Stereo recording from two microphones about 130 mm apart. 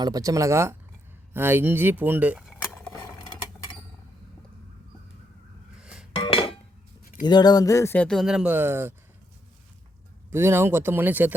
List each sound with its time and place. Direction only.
0.0 s speech: 30° right (ahead or behind)
5.8 s chink: 5° right (ahead or behind)
6.1 s a sound: 45° left (ahead or behind)
7.3 s a sound: 30° left (ahead or behind)
7.9 s speech: 5° left (ahead or behind); by 9.0 s 20° right (ahead or behind)
10.3 s speech: 20° right (ahead or behind)